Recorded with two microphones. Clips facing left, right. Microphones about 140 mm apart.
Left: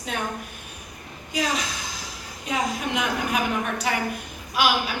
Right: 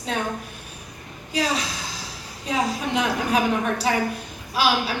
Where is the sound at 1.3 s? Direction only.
35° right (ahead or behind).